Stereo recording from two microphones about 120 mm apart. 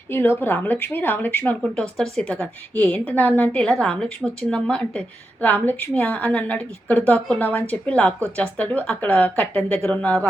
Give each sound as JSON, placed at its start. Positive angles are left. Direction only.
{"t": 0.1, "sound": "a woman's voice", "side_deg": 20}